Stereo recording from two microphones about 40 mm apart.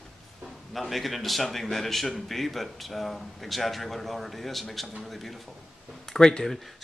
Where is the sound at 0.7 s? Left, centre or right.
Centre.